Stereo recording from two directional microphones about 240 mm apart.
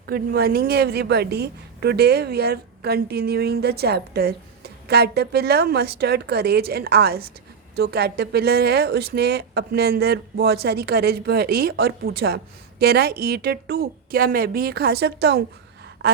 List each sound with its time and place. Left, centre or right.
0.0 s a woman's voice: right